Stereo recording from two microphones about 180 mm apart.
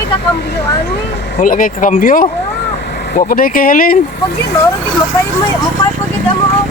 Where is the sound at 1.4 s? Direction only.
50° left (ahead or behind).